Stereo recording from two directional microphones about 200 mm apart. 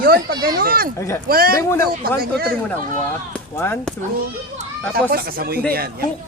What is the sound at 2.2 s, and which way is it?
Speech, 50° right (ahead or behind).